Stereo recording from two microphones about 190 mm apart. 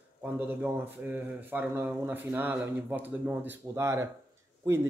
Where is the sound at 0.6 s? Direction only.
10° right (ahead or behind).